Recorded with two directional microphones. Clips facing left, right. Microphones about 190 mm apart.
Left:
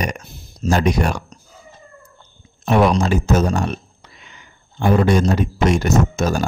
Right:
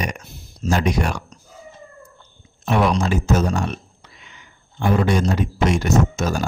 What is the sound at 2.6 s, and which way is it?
Speech, 40° left (ahead or behind).